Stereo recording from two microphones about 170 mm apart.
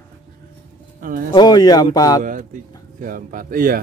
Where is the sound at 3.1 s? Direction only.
55° right (ahead or behind).